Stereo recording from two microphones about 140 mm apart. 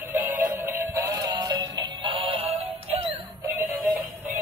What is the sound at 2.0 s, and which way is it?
Synthetic singing, 45° right (ahead or behind).